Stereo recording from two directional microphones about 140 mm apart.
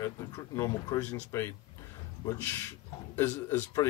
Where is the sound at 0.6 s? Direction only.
25° left (ahead or behind).